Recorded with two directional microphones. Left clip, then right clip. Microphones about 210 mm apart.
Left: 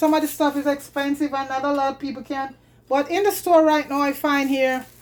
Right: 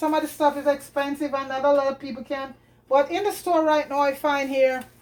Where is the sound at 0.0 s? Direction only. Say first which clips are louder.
Left 2 dB; 50° left (ahead or behind).